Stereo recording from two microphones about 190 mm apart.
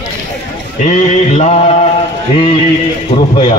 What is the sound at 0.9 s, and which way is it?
Mantra, 35° left (ahead or behind).